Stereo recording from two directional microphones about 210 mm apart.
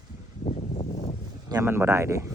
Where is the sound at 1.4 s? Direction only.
15° right (ahead or behind).